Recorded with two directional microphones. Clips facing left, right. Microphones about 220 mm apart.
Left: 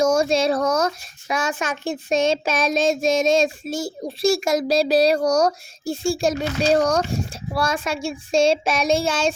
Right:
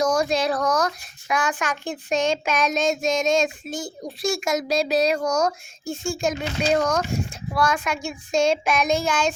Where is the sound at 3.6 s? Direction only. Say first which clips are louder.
Left 4 dB; 35° left (ahead or behind).